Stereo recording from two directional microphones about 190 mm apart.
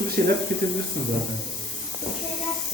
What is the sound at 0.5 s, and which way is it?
Speech, 50° right (ahead or behind).